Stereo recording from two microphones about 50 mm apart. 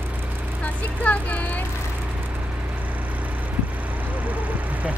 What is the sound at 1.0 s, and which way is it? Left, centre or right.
Speech, left.